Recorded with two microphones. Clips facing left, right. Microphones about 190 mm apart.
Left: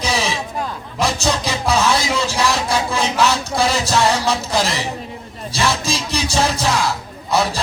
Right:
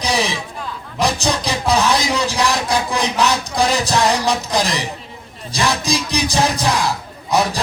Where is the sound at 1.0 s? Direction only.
15° right (ahead or behind).